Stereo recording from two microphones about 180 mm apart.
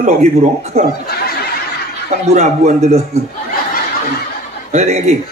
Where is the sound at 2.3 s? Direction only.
40° right (ahead or behind).